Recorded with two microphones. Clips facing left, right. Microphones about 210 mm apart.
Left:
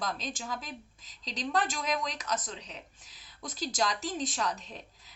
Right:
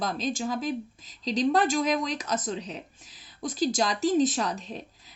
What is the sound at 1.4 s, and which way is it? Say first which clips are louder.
Speech: right 8 dB; 30° right (ahead or behind).